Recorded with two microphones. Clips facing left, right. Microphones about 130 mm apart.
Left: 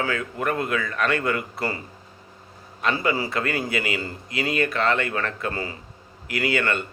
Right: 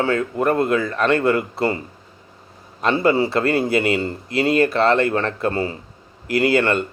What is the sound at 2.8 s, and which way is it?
A man's voice, 30° right (ahead or behind).